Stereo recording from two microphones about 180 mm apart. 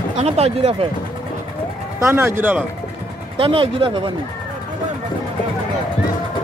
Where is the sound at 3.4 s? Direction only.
30° right (ahead or behind).